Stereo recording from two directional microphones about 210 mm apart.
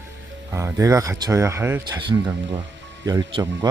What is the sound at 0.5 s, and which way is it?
Speech, 15° right (ahead or behind).